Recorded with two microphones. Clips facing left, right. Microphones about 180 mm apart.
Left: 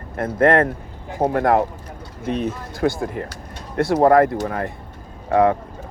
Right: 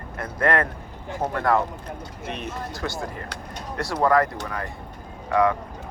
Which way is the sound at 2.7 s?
55° left (ahead or behind).